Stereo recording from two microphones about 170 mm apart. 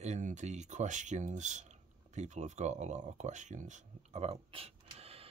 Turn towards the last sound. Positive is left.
turn(degrees=-35)  # may be behind; listen again after turning